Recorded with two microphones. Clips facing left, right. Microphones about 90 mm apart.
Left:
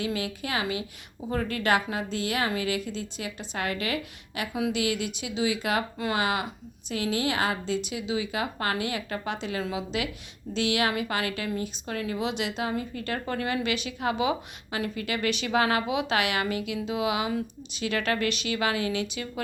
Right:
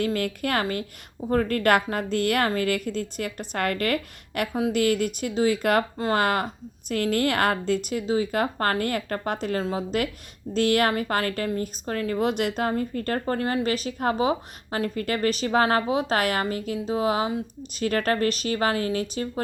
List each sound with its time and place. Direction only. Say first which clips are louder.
0.0 s a woman's voice: right 5 dB; 55° right (ahead or behind)